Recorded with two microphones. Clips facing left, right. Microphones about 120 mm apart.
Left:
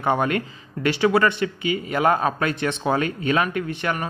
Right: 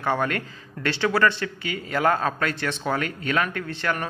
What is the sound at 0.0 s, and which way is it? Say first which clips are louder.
A man's voice: left 3 dB; 20° left (ahead or behind).